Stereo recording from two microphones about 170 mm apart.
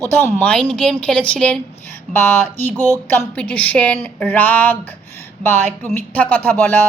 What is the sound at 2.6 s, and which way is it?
A woman's voice, 10° left (ahead or behind).